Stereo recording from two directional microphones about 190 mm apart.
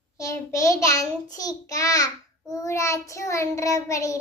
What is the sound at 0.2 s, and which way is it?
Child singing, 15° left (ahead or behind).